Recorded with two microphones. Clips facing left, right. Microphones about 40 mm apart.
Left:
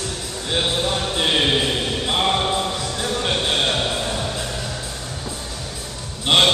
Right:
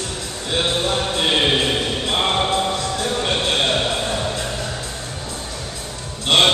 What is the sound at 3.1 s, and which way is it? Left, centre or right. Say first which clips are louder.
Music: even; centre.